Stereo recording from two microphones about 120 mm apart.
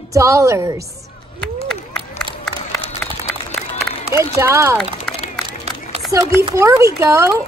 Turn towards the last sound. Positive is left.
turn(degrees=-25)  # may be behind; listen again after turning